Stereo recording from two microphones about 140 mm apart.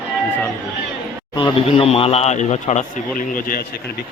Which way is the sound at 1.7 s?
45° left (ahead or behind).